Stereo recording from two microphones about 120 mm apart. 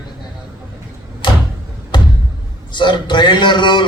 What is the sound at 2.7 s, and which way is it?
A man's voice, 40° left (ahead or behind).